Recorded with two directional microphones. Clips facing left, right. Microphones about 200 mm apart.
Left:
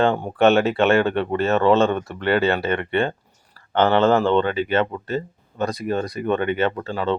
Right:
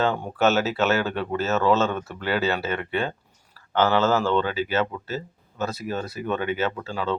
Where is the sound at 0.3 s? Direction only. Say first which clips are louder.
Left 5 dB; 5° right (ahead or behind).